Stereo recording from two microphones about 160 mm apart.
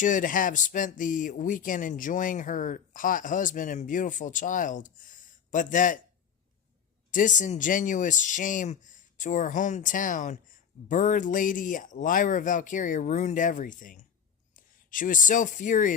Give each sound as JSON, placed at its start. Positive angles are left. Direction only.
{"t": 0.0, "sound": "speech", "side_deg": 55}
{"t": 7.1, "sound": "speech", "side_deg": 55}